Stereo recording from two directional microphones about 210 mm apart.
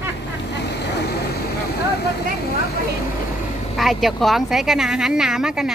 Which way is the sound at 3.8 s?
Centre (ahead or behind).